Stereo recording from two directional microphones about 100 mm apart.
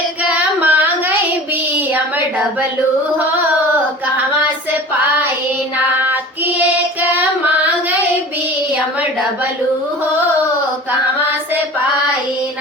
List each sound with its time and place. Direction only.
0.2 s female singing: 15° right (ahead or behind)
1.7 s a sound: 20° right (ahead or behind)
5.7 s child singing: 15° right (ahead or behind)
7.1 s female singing: 15° right (ahead or behind)